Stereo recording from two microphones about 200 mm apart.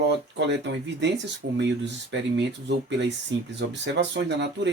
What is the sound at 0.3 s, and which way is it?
Speech, 60° right (ahead or behind).